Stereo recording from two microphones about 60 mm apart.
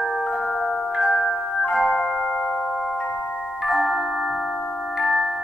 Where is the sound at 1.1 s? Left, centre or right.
Centre.